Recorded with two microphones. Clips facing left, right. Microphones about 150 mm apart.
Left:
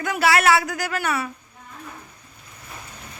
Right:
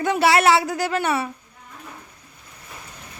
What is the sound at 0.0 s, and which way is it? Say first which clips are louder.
Speech: right 2 dB; 25° right (ahead or behind).